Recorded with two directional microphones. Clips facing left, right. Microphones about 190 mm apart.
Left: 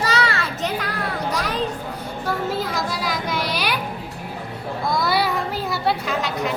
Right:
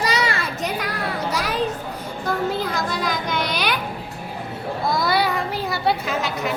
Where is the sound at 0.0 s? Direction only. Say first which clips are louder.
Even; 15° right (ahead or behind).